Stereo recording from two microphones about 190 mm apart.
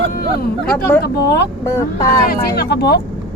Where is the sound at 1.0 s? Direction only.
60° left (ahead or behind).